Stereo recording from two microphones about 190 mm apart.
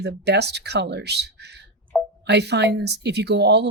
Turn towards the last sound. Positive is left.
turn(degrees=-60)  # may be behind; listen again after turning